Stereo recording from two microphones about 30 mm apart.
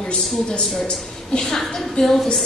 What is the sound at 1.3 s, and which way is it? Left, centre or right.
Speech, centre.